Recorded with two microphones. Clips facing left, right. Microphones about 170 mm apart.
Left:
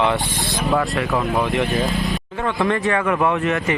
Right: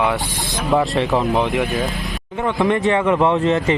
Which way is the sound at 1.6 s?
Centre (ahead or behind).